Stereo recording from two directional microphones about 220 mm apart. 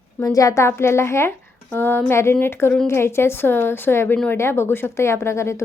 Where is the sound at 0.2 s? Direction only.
15° left (ahead or behind).